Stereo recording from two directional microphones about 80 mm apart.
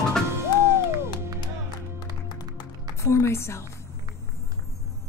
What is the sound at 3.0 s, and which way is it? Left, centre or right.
Music, left.